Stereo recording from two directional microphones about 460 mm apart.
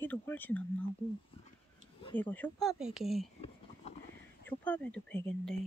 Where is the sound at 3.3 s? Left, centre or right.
Centre.